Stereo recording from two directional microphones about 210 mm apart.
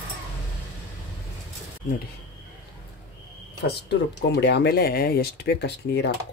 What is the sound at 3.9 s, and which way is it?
Speech, 55° left (ahead or behind).